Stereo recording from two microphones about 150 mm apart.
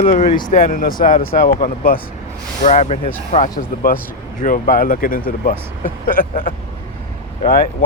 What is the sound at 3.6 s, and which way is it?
Speech, 75° left (ahead or behind).